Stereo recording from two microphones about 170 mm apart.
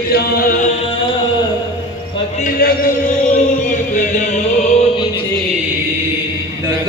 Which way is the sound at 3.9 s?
45° left (ahead or behind).